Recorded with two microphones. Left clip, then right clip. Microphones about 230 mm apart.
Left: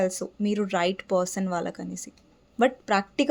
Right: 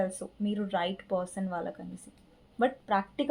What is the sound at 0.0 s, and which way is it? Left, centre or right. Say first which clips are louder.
Speech: left 6 dB; left.